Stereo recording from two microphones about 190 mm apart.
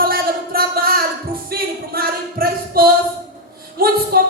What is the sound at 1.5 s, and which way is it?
Music, 55° right (ahead or behind).